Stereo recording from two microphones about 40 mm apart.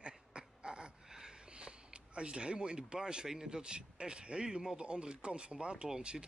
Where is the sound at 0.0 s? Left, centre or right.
Right.